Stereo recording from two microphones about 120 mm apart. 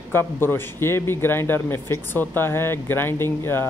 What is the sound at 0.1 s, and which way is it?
A man's voice, 20° left (ahead or behind).